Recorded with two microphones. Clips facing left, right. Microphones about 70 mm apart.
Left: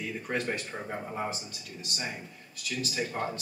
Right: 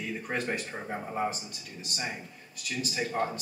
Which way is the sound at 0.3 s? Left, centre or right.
Centre.